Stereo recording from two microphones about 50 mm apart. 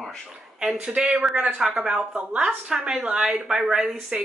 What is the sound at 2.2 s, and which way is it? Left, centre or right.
A woman's voice, right.